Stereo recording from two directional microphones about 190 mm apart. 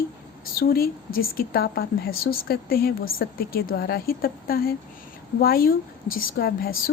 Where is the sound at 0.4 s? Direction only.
50° left (ahead or behind).